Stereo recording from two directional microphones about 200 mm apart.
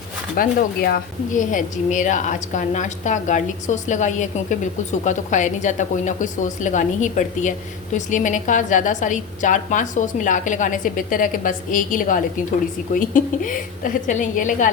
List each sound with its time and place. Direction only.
0.3 s a woman's voice: 50° left (ahead or behind)